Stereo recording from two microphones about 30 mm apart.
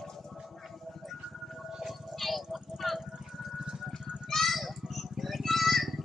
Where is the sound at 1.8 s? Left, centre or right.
Centre.